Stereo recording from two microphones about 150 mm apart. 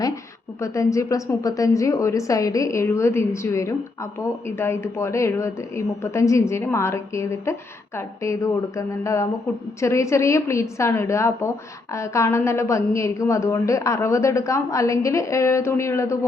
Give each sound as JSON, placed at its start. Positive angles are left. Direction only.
{"t": 0.6, "sound": "a woman's voice", "side_deg": 20}